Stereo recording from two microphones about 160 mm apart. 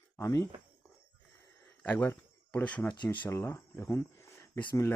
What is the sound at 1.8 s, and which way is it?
Speech, 10° left (ahead or behind).